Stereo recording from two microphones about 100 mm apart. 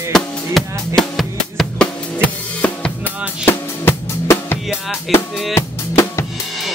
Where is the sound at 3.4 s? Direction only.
25° left (ahead or behind).